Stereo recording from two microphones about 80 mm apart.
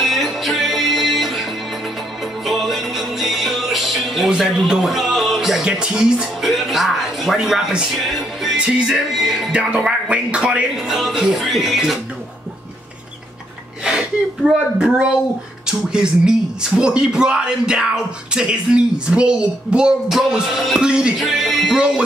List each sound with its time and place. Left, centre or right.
0.0 s music: centre
8.5 s speech: centre
9.5 s speech: centre
10.9 s speech: centre
14.5 s speech: centre